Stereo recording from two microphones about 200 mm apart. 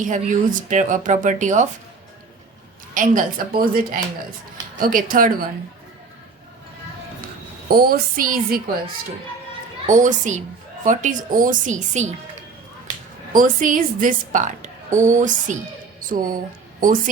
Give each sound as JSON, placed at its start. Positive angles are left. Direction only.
{"t": 0.0, "sound": "a woman's voice", "side_deg": -40}
{"t": 2.9, "sound": "speech", "side_deg": -40}
{"t": 7.7, "sound": "speech", "side_deg": -50}
{"t": 9.8, "sound": "a woman's voice", "side_deg": -40}
{"t": 13.3, "sound": "a woman's voice", "side_deg": -40}